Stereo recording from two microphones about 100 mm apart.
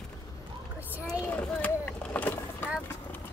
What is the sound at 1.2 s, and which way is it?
Vehicle, 15° left (ahead or behind).